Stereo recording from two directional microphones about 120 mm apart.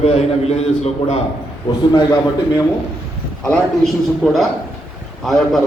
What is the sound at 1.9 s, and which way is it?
Speech, 35° left (ahead or behind).